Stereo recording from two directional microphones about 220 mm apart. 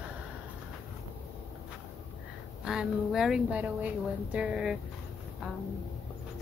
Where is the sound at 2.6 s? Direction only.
5° right (ahead or behind).